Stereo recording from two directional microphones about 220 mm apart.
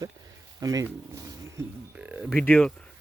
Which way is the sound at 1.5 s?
5° right (ahead or behind).